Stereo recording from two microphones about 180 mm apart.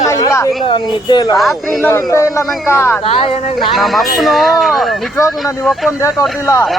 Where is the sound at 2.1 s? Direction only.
15° left (ahead or behind).